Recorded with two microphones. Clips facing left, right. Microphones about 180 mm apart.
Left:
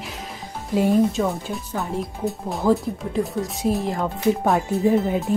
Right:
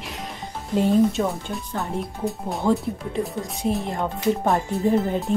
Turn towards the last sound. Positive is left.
turn(degrees=0)  # may be behind; listen again after turning